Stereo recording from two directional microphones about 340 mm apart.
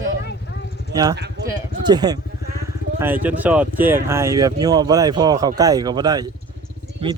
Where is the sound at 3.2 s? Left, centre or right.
Centre.